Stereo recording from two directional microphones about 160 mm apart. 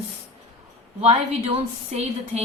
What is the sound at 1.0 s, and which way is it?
A woman's voice, 40° right (ahead or behind).